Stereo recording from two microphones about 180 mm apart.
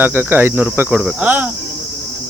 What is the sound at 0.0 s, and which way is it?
Speech, 10° right (ahead or behind).